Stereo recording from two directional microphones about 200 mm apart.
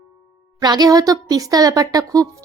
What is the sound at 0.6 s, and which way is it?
Speech, 20° right (ahead or behind).